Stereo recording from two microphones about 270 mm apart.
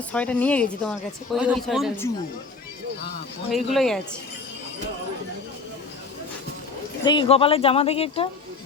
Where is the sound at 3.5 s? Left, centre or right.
Centre.